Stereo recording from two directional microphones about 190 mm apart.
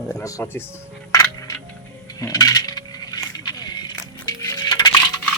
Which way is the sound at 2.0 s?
20° left (ahead or behind).